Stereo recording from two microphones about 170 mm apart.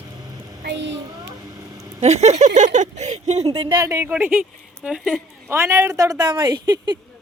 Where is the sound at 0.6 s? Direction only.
90° right.